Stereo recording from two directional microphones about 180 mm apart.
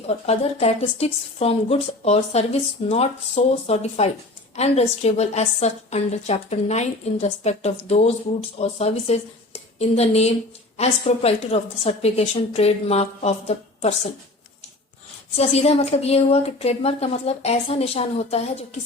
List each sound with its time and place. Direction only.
0.1 s a woman's voice: 35° left (ahead or behind)
15.4 s a woman's voice: 35° left (ahead or behind)